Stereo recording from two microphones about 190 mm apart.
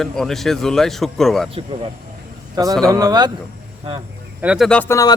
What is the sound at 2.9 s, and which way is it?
Speech, 20° right (ahead or behind).